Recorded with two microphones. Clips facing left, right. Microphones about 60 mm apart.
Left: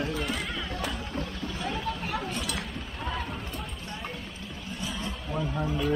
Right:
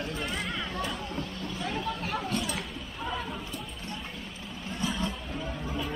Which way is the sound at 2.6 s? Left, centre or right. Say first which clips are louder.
Left 1 dB; centre.